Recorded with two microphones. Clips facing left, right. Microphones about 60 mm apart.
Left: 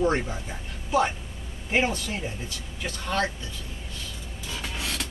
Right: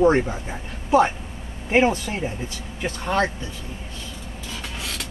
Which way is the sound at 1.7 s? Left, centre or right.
Right.